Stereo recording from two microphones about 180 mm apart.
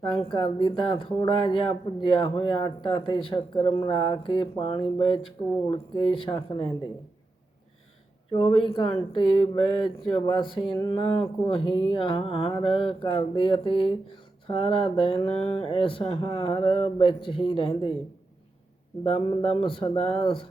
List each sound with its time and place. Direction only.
0.2 s speech: 25° left (ahead or behind)
8.3 s speech: 30° left (ahead or behind)
19.0 s speech: 30° left (ahead or behind)